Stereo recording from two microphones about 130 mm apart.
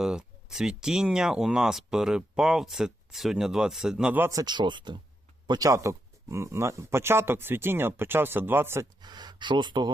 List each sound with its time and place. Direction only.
0.0 s speech: 5° right (ahead or behind)
4.3 s speech: 30° right (ahead or behind)
5.5 s speech: 25° right (ahead or behind)
9.0 s speech: 35° right (ahead or behind)